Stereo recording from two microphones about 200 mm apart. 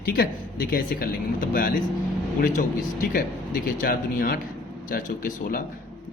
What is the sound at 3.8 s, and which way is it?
A man's voice, 45° left (ahead or behind).